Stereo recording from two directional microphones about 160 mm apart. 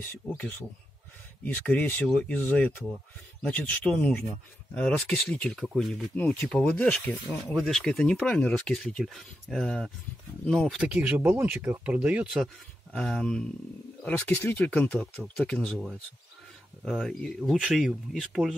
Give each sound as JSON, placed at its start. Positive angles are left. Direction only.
{"t": 0.2, "sound": "speech", "side_deg": 20}
{"t": 12.9, "sound": "speech", "side_deg": 5}